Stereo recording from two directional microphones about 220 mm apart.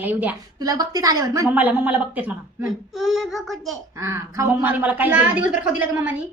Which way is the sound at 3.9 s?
15° right (ahead or behind).